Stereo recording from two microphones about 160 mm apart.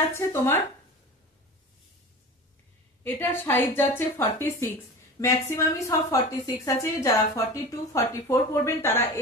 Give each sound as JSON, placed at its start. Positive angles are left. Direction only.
{"t": 0.1, "sound": "a woman's voice", "side_deg": 15}
{"t": 3.0, "sound": "a woman's voice", "side_deg": 15}